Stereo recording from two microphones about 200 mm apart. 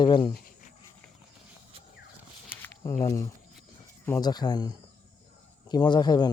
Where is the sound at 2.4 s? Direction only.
10° left (ahead or behind).